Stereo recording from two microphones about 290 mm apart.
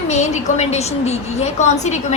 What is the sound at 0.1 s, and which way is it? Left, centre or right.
A woman's voice, left.